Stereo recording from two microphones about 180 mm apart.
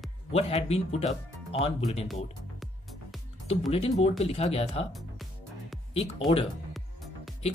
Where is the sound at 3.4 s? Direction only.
35° left (ahead or behind).